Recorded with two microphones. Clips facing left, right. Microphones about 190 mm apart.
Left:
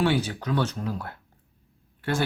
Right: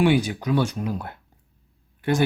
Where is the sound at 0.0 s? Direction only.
15° right (ahead or behind).